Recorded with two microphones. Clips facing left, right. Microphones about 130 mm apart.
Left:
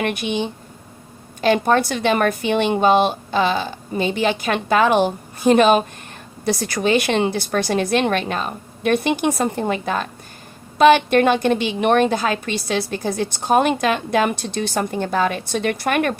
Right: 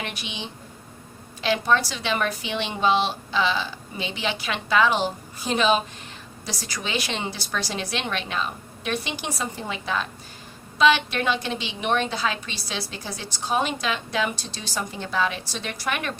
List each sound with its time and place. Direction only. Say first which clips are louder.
0.0 s a woman's voice: left 12 dB; 55° left (ahead or behind)